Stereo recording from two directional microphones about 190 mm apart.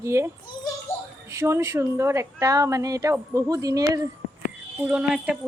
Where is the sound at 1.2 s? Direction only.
15° right (ahead or behind).